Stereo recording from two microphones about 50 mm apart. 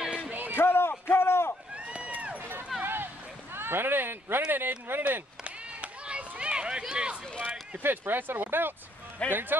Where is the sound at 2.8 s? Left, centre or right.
Right.